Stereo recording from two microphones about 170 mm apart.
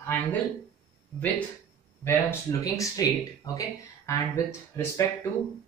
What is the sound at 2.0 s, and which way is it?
Speech, 15° left (ahead or behind).